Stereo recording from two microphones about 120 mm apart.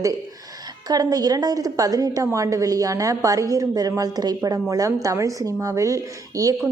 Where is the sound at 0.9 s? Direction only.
30° right (ahead or behind).